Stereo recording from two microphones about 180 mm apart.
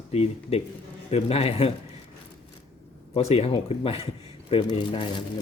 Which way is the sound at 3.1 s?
35° left (ahead or behind).